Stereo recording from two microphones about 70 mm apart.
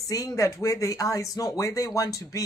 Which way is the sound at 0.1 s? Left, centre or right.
Left.